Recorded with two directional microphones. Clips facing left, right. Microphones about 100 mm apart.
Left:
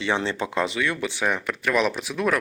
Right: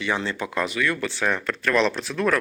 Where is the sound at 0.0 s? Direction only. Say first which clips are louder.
Left 1 dB; 25° left (ahead or behind).